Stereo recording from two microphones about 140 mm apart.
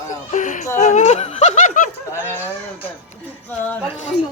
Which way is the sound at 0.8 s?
60° left (ahead or behind).